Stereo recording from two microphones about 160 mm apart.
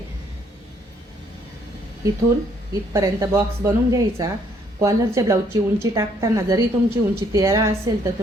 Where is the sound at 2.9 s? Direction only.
20° right (ahead or behind).